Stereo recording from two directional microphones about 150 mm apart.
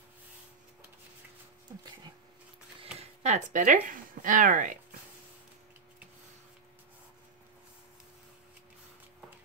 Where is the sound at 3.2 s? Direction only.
55° right (ahead or behind).